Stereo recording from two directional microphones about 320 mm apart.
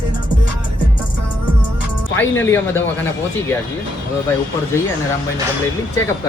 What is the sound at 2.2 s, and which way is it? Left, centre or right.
Speech, centre.